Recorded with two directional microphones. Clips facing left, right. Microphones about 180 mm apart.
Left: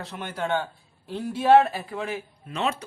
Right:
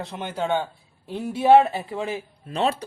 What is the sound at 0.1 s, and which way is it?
A man's voice, 20° right (ahead or behind).